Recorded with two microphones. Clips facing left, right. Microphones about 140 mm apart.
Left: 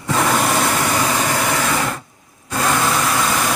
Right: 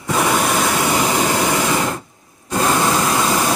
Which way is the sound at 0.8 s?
20° right (ahead or behind).